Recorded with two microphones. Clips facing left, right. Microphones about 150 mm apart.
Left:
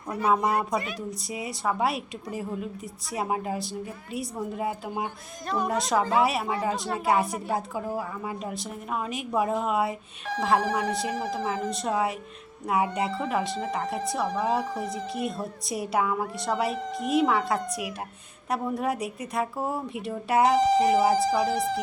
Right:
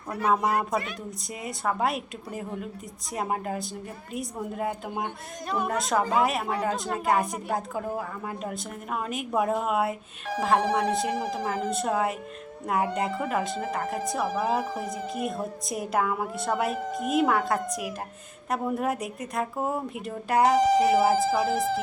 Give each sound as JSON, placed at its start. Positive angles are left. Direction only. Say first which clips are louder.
{"t": 0.1, "sound": "a woman's voice", "louder": "even", "side_deg": 0}
{"t": 20.6, "sound": "a woman's voice", "louder": "even", "side_deg": -10}